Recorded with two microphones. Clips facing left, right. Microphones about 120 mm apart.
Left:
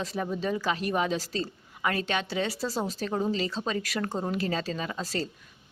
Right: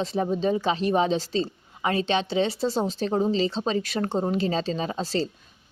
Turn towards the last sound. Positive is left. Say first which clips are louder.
# right 5 dB
turn(degrees=-25)  # may be behind; listen again after turning